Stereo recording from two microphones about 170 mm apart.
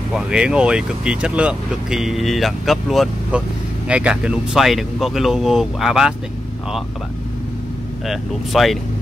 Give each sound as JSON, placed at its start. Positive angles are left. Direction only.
{"t": 0.1, "sound": "speech", "side_deg": -5}
{"t": 8.1, "sound": "speech", "side_deg": 0}